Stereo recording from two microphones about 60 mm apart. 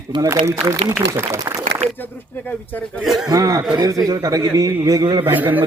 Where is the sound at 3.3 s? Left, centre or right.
Right.